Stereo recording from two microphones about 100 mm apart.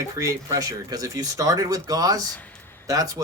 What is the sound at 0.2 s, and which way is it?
Speech, 35° right (ahead or behind).